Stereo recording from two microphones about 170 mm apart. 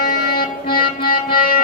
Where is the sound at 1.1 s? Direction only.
55° left (ahead or behind).